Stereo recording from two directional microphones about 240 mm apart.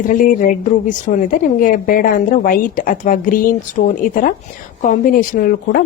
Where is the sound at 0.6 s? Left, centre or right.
Left.